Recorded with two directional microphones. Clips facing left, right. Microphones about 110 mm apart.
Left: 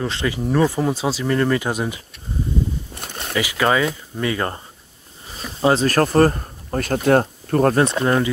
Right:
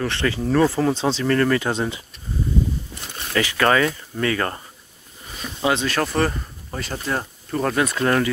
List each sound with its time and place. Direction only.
0.0 s speech: 15° left (ahead or behind)
3.3 s speech: 10° left (ahead or behind)
5.4 s speech: 35° left (ahead or behind); by 7.7 s 55° left (ahead or behind)
7.7 s speech: 25° left (ahead or behind)